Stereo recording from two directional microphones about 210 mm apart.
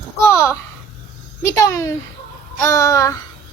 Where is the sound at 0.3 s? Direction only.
15° left (ahead or behind).